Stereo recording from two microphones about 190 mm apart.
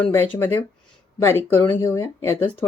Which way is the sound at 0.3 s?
10° left (ahead or behind).